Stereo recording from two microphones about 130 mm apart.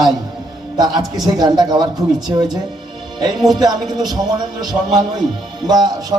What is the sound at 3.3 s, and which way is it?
Speech, centre (ahead or behind).